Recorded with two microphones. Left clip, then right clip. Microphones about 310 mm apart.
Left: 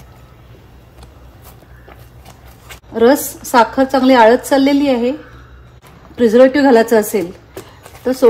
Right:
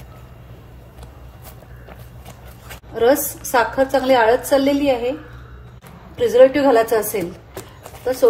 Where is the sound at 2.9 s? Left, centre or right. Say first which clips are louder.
Left 4 dB; left.